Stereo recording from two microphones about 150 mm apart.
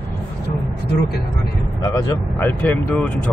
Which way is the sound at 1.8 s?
20° left (ahead or behind).